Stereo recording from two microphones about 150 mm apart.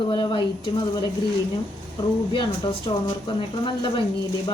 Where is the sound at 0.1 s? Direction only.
30° left (ahead or behind).